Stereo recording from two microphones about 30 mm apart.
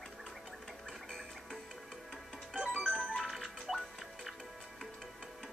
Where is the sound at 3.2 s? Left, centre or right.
Centre.